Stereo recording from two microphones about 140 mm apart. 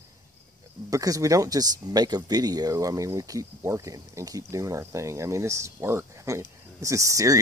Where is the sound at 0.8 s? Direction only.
25° right (ahead or behind).